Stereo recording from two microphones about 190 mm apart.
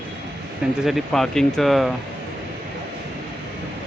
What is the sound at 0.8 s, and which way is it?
Speech, centre (ahead or behind).